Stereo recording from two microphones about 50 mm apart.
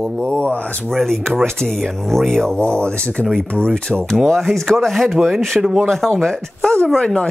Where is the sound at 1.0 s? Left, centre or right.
Centre.